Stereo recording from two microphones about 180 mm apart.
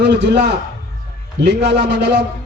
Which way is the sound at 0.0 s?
75° right (ahead or behind).